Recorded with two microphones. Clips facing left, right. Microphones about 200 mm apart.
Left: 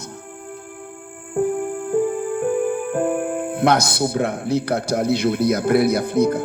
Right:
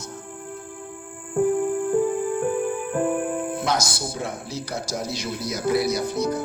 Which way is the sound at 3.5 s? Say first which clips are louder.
Left 7 dB; 60° left (ahead or behind).